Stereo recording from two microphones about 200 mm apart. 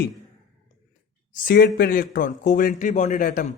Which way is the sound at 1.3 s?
45° left (ahead or behind).